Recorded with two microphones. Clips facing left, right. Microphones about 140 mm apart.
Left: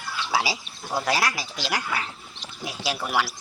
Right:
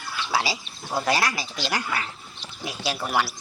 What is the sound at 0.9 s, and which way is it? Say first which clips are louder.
Speech: right 1 dB; 5° left (ahead or behind).